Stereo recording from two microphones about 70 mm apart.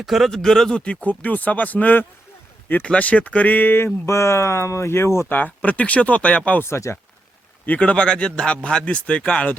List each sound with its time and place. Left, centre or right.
0.0 s a man's voice: centre
1.0 s speech: left
4.0 s speech: left
5.3 s speech: left
6.7 s speech: left
7.6 s a man's voice: left